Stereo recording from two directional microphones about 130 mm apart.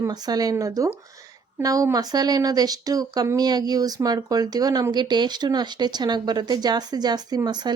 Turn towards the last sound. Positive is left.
turn(degrees=-35)  # may be behind; listen again after turning